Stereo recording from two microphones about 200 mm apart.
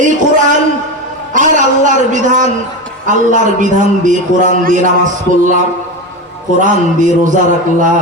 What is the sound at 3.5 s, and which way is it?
A man's voice, 40° right (ahead or behind).